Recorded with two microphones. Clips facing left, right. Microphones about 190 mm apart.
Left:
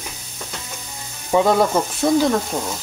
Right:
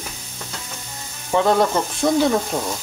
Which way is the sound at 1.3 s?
10° left (ahead or behind).